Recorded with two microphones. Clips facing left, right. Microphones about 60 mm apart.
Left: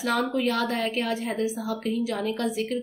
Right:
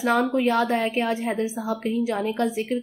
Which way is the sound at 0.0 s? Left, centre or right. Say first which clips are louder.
Right 4 dB; right.